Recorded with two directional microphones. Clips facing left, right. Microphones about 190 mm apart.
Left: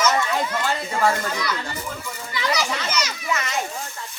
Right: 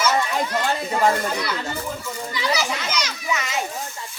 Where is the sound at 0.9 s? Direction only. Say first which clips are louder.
Right 2 dB; 20° right (ahead or behind).